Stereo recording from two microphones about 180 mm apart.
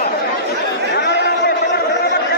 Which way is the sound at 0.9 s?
70° left (ahead or behind).